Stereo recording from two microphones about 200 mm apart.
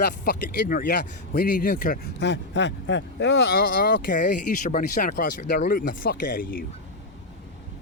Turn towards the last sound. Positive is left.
turn(degrees=45)  # may be behind; listen again after turning